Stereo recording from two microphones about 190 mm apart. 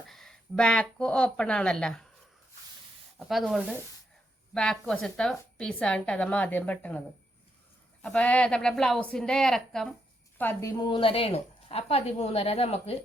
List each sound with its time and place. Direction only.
0.1 s speech: centre (ahead or behind)
3.2 s a woman's voice: centre (ahead or behind)
8.0 s a woman's voice: 5° left (ahead or behind)
10.8 s a woman's voice: 25° left (ahead or behind)